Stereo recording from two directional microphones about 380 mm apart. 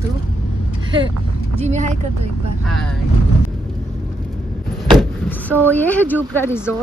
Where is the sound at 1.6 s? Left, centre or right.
Centre.